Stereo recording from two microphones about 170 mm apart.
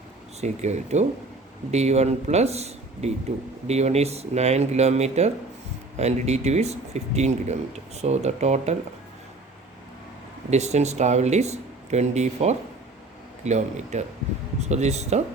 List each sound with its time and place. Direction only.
0.4 s speech: 40° right (ahead or behind)
10.5 s speech: 40° right (ahead or behind)